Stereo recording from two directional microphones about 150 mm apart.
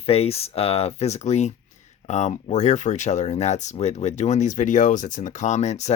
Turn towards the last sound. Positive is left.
turn(degrees=50)  # may be behind; listen again after turning